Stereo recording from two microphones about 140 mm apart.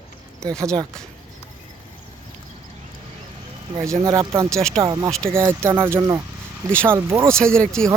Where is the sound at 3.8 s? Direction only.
20° right (ahead or behind).